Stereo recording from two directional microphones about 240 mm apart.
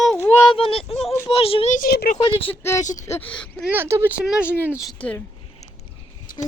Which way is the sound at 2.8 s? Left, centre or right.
Left.